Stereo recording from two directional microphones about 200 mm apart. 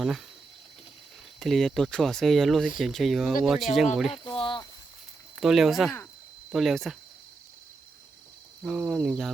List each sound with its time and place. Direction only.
1.4 s speech: centre (ahead or behind)
4.2 s a sound: 25° left (ahead or behind)
5.4 s speech: centre (ahead or behind)
8.6 s speech: 5° right (ahead or behind)